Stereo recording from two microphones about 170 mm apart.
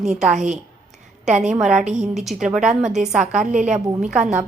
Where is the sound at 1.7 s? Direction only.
45° right (ahead or behind).